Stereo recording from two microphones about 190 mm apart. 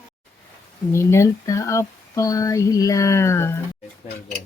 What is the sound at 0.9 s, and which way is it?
Speech, 15° left (ahead or behind).